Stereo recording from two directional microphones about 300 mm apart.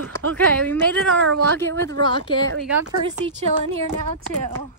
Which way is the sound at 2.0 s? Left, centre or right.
Centre.